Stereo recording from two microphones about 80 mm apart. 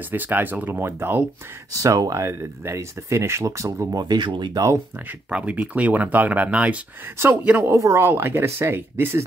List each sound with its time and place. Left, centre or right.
0.1 s speech: right
1.7 s speech: right
4.0 s speech: right
5.3 s speech: centre
7.7 s speech: right
8.1 s speech: right